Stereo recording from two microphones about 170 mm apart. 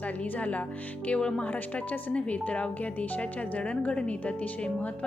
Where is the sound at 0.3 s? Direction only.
10° left (ahead or behind).